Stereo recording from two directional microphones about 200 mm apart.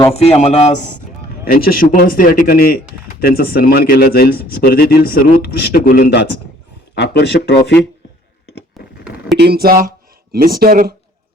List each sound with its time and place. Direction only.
0.1 s a man's voice: 35° left (ahead or behind)
1.5 s speech: 45° left (ahead or behind)
8.8 s a sound: centre (ahead or behind)
9.4 s speech: 50° right (ahead or behind)